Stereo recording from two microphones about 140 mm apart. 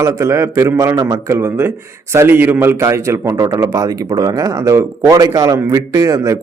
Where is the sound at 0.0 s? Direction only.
20° right (ahead or behind).